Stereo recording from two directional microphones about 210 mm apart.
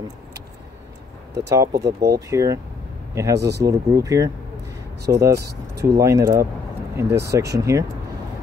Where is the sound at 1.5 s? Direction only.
15° right (ahead or behind).